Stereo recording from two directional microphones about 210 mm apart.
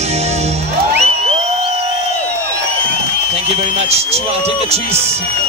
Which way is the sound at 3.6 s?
30° right (ahead or behind).